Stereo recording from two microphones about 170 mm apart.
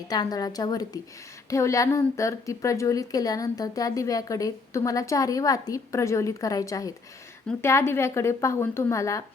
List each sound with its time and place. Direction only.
0.1 s a woman's voice: 25° left (ahead or behind)